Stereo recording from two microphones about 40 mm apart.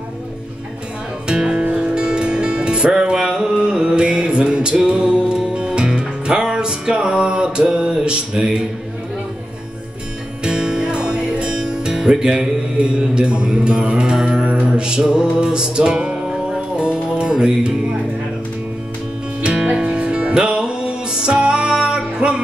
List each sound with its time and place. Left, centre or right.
1.2 s music: right
10.4 s music: right
12.1 s mantra: right
14.4 s mantra: right
16.3 s music: right
19.4 s music: right